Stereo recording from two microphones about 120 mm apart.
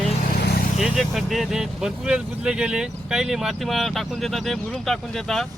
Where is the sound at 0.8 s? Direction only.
Centre (ahead or behind).